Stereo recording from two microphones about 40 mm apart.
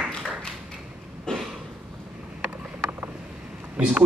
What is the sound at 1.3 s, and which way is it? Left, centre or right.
Cough, centre.